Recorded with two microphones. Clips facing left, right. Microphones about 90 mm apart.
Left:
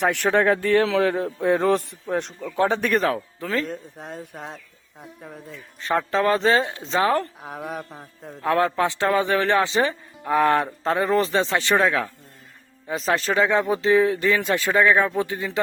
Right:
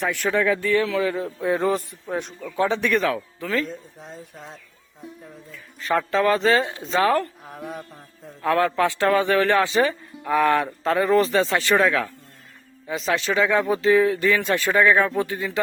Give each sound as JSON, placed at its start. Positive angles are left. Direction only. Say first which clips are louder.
{"t": 0.0, "sound": "a man's voice", "louder": "left 3 dB", "side_deg": 70}
{"t": 2.6, "sound": "speech", "louder": "left 1 dB", "side_deg": 45}
{"t": 3.7, "sound": "a man's voice", "louder": "left 3 dB", "side_deg": 60}
{"t": 6.1, "sound": "a man's voice", "louder": "even", "side_deg": 30}
{"t": 7.4, "sound": "a man's voice", "louder": "left 3 dB", "side_deg": 60}
{"t": 8.4, "sound": "a man's voice", "louder": "right 1 dB", "side_deg": 25}
{"t": 12.9, "sound": "a man's voice", "louder": "left 1 dB", "side_deg": 40}